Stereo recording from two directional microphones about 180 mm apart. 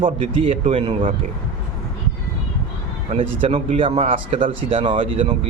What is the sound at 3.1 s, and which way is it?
Speech, 35° right (ahead or behind).